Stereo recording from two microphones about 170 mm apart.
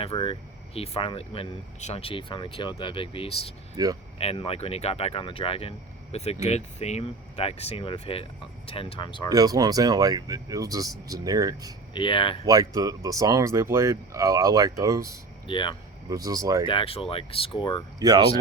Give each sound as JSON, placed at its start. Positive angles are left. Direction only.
{"t": 0.0, "sound": "speech", "side_deg": 35}
{"t": 3.8, "sound": "speech", "side_deg": -20}
{"t": 4.2, "sound": "speech", "side_deg": 35}
{"t": 9.3, "sound": "speech", "side_deg": -20}
{"t": 11.9, "sound": "speech", "side_deg": 30}
{"t": 12.5, "sound": "speech", "side_deg": -20}
{"t": 15.4, "sound": "speech", "side_deg": 30}
{"t": 16.0, "sound": "speech", "side_deg": -20}
{"t": 16.6, "sound": "speech", "side_deg": 30}